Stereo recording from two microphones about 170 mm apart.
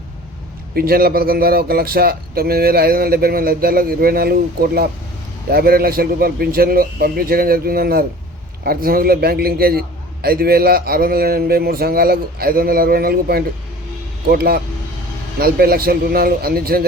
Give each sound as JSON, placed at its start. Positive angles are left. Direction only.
{"t": 0.8, "sound": "a man's voice", "side_deg": -60}